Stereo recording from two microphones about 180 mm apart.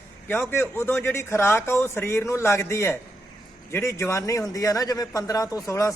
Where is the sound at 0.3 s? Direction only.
10° left (ahead or behind).